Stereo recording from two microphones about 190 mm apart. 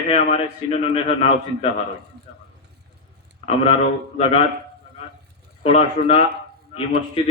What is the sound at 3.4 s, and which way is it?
A man's voice, 30° left (ahead or behind).